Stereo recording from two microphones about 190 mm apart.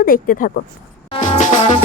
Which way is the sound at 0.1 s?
50° left (ahead or behind).